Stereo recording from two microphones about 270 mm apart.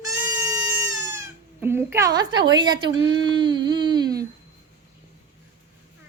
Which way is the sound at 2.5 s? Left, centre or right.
Centre.